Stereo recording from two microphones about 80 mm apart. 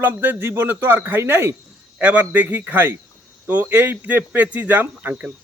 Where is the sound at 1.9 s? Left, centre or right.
Right.